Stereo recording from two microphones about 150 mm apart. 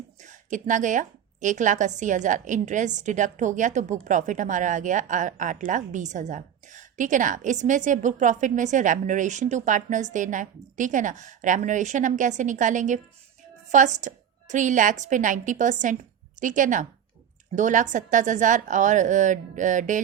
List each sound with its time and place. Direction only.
0.2 s a woman's voice: 55° right (ahead or behind)